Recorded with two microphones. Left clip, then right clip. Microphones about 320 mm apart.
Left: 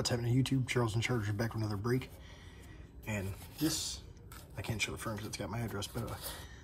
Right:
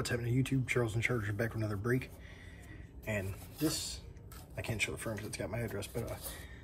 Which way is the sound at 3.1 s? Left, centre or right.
Centre.